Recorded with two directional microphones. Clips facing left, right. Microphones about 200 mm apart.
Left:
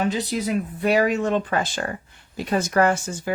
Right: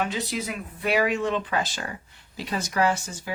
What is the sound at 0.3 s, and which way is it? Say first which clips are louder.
Speech: left 7 dB; 40° left (ahead or behind).